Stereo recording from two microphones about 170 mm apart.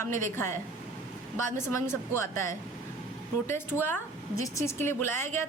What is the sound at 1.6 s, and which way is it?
Speech, 15° left (ahead or behind).